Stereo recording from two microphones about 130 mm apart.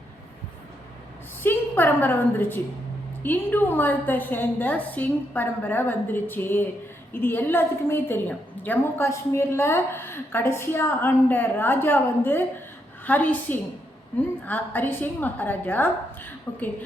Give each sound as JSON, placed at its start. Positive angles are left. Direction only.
{"t": 1.4, "sound": "a woman's voice", "side_deg": 15}